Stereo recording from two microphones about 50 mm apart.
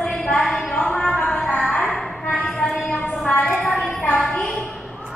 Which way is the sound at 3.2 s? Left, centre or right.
Left.